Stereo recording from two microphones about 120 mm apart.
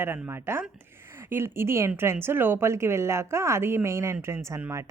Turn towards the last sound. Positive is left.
turn(degrees=-20)  # may be behind; listen again after turning